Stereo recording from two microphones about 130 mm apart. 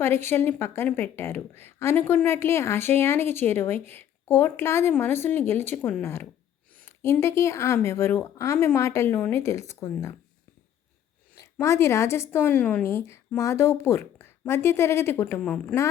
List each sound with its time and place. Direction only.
0.0 s a woman's voice: 20° left (ahead or behind)
11.5 s a woman's voice: 20° left (ahead or behind)